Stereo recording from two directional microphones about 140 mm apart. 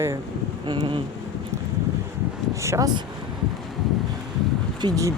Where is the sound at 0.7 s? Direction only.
35° right (ahead or behind).